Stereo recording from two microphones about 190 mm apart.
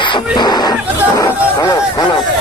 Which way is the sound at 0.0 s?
25° left (ahead or behind).